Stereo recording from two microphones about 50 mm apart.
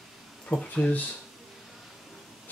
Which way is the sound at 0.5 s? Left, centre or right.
Left.